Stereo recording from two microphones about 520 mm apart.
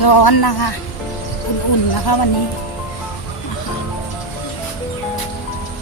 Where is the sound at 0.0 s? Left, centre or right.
Left.